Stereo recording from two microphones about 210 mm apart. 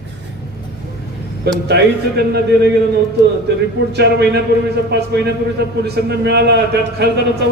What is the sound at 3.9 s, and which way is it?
A man's voice, 50° right (ahead or behind).